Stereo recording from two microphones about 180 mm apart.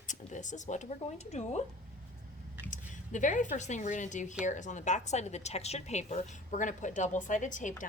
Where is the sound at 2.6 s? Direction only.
45° left (ahead or behind).